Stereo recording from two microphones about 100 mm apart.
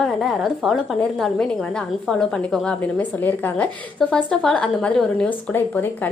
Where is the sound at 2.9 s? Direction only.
20° left (ahead or behind).